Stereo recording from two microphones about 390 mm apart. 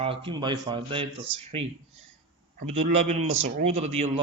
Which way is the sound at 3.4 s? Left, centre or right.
Centre.